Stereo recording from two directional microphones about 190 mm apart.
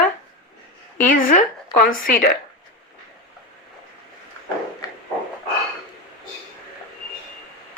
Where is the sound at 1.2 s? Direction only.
45° left (ahead or behind).